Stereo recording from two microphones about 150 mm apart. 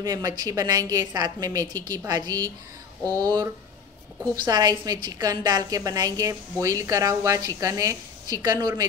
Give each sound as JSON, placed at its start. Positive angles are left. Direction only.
{"t": 0.0, "sound": "a woman's voice", "side_deg": -25}
{"t": 4.5, "sound": "a woman's voice", "side_deg": -25}